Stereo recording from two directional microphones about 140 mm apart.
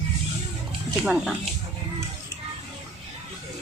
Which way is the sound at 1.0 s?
5° right (ahead or behind).